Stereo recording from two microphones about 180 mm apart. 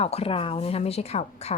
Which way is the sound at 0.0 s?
35° left (ahead or behind).